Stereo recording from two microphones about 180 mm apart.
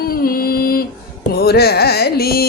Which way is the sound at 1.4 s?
60° left (ahead or behind).